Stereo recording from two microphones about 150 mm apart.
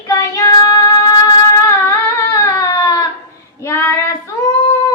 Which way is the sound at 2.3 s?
20° left (ahead or behind).